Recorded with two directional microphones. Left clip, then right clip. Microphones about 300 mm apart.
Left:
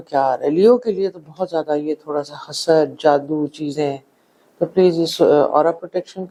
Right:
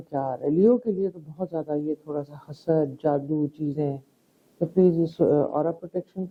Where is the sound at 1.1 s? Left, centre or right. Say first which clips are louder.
Left 9 dB; centre.